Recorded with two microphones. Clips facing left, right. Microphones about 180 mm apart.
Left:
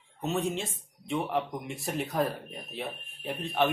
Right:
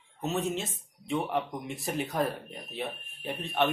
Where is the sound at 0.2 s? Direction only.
Centre (ahead or behind).